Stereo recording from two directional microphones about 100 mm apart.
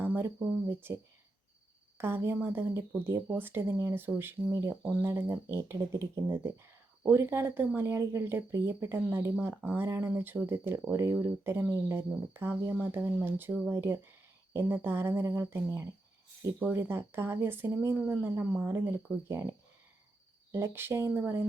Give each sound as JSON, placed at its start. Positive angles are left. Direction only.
{"t": 0.0, "sound": "speech", "side_deg": -20}
{"t": 2.0, "sound": "speech", "side_deg": -25}
{"t": 4.8, "sound": "speech", "side_deg": -20}
{"t": 20.5, "sound": "speech", "side_deg": -25}